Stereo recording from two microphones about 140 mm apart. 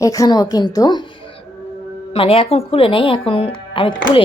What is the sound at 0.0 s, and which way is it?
A woman's voice, 25° left (ahead or behind).